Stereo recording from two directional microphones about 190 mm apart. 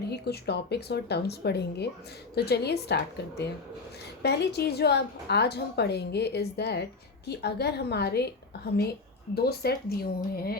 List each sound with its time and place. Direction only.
0.1 s a woman's voice: 60° left (ahead or behind)
10.3 s music: 55° left (ahead or behind)